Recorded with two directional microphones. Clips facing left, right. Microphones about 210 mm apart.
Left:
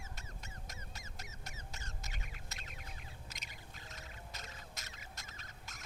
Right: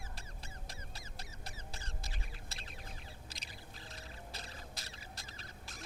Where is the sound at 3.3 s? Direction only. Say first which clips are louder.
Right 2 dB; 30° right (ahead or behind).